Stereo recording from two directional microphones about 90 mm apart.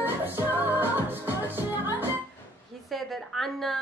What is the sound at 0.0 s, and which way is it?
Music, 25° right (ahead or behind).